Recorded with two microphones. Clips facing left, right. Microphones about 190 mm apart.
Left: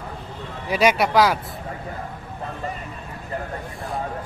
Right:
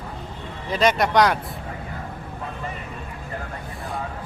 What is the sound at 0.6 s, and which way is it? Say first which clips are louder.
Speech: left 1 dB; 10° left (ahead or behind).